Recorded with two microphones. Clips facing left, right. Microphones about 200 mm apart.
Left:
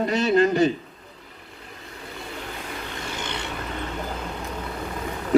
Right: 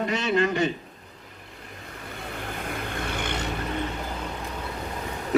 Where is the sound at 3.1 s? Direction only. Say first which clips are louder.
Right 1 dB; 55° right (ahead or behind).